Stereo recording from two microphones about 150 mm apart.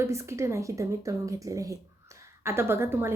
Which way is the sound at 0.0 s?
20° right (ahead or behind).